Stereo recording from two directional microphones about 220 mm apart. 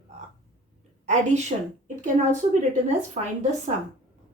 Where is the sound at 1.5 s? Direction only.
35° right (ahead or behind).